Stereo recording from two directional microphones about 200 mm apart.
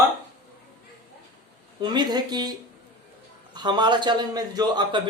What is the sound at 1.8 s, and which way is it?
A man's voice, 20° right (ahead or behind).